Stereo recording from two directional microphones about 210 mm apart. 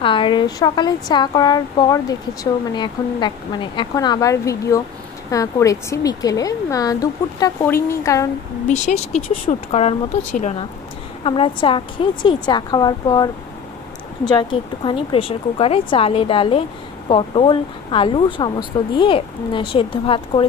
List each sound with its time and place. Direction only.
0.0 s speech: 25° left (ahead or behind)
8.6 s speech: 35° left (ahead or behind)